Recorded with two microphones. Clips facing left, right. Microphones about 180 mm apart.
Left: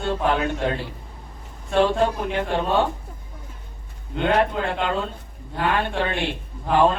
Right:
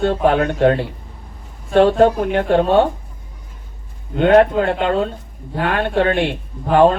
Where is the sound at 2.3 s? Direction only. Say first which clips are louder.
Right 7 dB; 60° right (ahead or behind).